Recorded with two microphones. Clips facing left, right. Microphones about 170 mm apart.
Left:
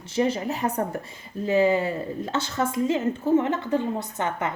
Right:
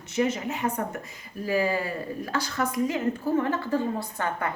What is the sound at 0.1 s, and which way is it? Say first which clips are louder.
Speech: left 2 dB; 30° left (ahead or behind).